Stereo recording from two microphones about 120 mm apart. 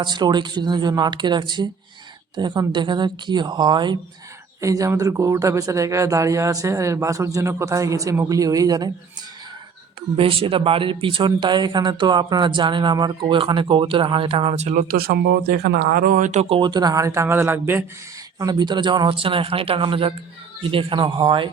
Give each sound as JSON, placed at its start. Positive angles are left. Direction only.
{"t": 0.0, "sound": "speech", "side_deg": -40}
{"t": 4.6, "sound": "speech", "side_deg": -25}
{"t": 10.2, "sound": "speech", "side_deg": -50}
{"t": 16.1, "sound": "speech", "side_deg": -80}
{"t": 16.6, "sound": "speech", "side_deg": -35}
{"t": 18.3, "sound": "speech", "side_deg": -35}